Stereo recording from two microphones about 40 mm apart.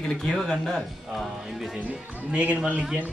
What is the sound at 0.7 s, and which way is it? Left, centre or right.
Speech, centre.